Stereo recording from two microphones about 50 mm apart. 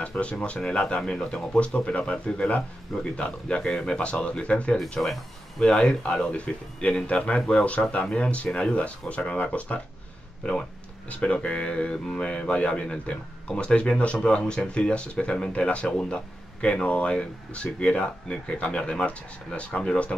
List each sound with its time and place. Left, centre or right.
0.0 s speech: left
11.1 s speech: left